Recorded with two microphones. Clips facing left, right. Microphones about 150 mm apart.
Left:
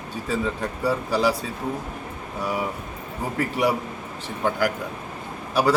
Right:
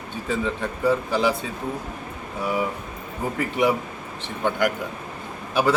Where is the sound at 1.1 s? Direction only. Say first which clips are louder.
Even; 35° left (ahead or behind).